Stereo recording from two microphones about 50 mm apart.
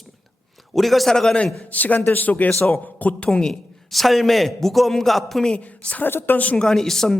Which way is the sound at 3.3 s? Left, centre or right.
Centre.